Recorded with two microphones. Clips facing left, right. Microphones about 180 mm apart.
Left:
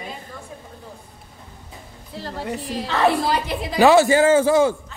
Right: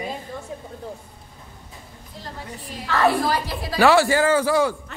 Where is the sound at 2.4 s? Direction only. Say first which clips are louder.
Left 12 dB; 85° left.